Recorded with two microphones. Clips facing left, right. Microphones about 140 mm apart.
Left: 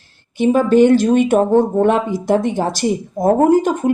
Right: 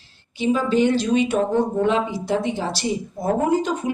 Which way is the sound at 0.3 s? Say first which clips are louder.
Left 7 dB; 55° left (ahead or behind).